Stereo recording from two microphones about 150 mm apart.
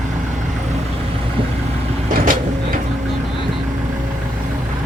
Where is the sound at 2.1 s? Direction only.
65° right (ahead or behind).